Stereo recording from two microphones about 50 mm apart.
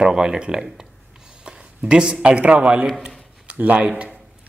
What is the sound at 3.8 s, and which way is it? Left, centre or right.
Speech, right.